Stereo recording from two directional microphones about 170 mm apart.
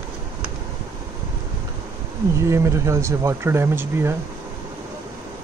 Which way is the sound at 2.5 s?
15° right (ahead or behind).